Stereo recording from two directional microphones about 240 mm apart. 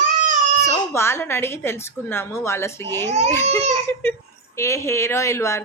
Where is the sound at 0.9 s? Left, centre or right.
Centre.